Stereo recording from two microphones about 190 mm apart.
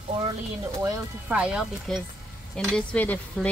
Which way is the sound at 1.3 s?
5° right (ahead or behind).